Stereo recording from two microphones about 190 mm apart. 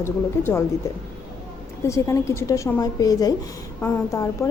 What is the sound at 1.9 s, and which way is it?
A woman's voice, 15° left (ahead or behind).